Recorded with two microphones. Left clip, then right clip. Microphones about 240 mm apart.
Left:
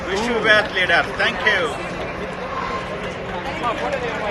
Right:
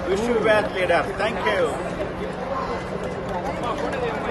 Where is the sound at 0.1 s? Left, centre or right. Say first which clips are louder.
Left 3 dB; centre.